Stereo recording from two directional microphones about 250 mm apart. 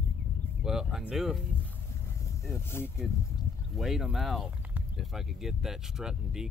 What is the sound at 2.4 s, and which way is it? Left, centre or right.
Speech, centre.